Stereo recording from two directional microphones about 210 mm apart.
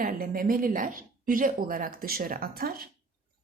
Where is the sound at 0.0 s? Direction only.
45° right (ahead or behind).